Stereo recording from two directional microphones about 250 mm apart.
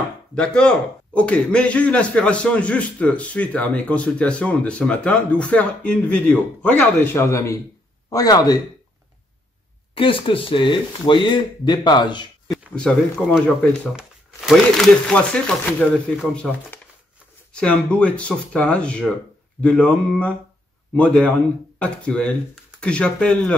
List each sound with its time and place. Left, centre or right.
0.3 s a man's voice: centre
9.9 s speech: left
12.7 s a man's voice: centre